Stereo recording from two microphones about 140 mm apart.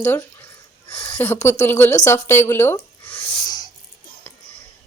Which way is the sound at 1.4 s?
20° left (ahead or behind).